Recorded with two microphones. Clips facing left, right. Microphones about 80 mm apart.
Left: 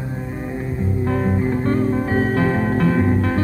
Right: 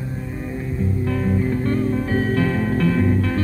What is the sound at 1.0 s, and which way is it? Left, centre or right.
Music, left.